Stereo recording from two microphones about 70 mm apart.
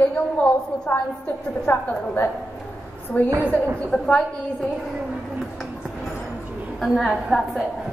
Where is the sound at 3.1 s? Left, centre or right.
Left.